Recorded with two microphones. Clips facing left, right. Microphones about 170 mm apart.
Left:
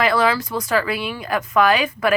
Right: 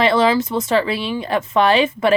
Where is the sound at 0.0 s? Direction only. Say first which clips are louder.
Right 3 dB; 25° right (ahead or behind).